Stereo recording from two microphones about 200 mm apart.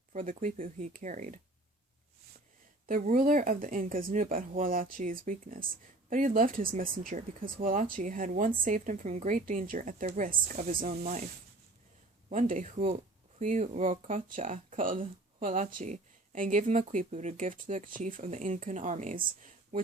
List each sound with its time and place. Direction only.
0.1 s speech: 40° right (ahead or behind)
2.8 s speech: 40° right (ahead or behind)
12.3 s speech: 40° right (ahead or behind)
19.4 s a sound: 40° right (ahead or behind)